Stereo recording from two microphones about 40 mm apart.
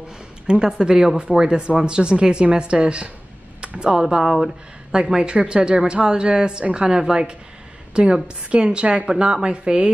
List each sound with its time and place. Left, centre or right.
0.5 s speech: right
4.2 s speech: centre
4.9 s speech: right